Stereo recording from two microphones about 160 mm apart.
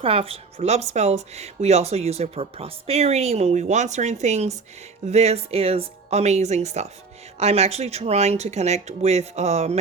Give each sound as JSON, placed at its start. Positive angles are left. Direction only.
{"t": 0.0, "sound": "speech", "side_deg": -35}